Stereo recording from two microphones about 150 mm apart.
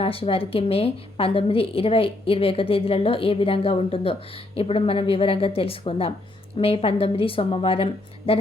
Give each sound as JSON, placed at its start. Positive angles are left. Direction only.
{"t": 0.0, "sound": "a woman's voice", "side_deg": 40}